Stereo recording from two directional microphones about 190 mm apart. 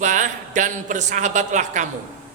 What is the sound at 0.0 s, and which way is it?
A man's voice, 40° right (ahead or behind).